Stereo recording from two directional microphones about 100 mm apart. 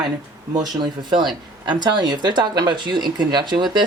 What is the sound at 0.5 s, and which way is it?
Speech, 50° right (ahead or behind).